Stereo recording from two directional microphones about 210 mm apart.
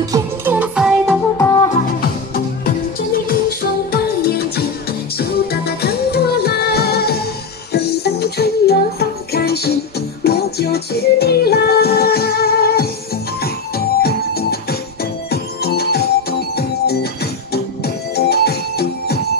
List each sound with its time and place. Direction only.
0.0 s music: 15° right (ahead or behind)
1.7 s music: 45° left (ahead or behind)